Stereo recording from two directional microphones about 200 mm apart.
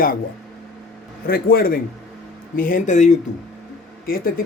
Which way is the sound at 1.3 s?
50° left (ahead or behind).